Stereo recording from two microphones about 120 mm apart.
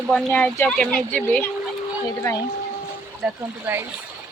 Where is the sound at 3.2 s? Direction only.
5° right (ahead or behind).